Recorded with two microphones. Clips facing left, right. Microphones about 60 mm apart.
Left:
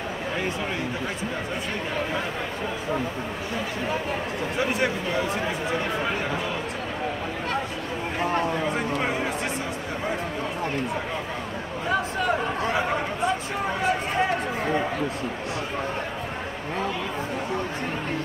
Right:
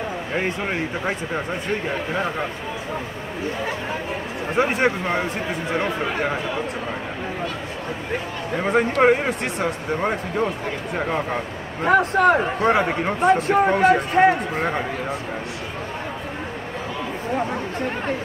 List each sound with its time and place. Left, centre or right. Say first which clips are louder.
0.4 s speech: right 6 dB; right
4.6 s speech: right 6 dB; right
8.6 s speech: right 9 dB; right
11.8 s speech: right 10 dB; right